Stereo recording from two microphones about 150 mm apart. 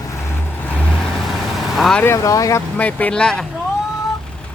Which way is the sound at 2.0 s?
20° left (ahead or behind).